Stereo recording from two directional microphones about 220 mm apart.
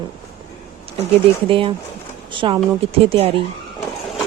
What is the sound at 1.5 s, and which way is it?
Speech, 25° right (ahead or behind).